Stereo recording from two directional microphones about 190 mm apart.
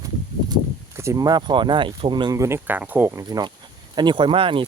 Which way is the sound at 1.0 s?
15° right (ahead or behind).